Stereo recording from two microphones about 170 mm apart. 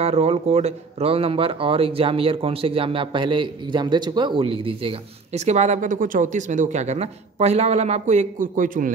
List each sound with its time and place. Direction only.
0.0 s speech: 35° right (ahead or behind); by 8.9 s 55° right (ahead or behind)